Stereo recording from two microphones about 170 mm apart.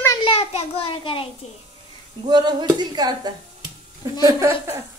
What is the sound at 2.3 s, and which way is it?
A woman's voice, 25° right (ahead or behind).